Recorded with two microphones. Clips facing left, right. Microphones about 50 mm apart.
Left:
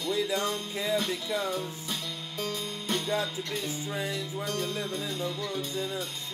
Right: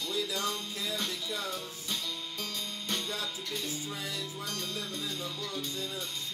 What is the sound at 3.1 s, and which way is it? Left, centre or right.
Music, left.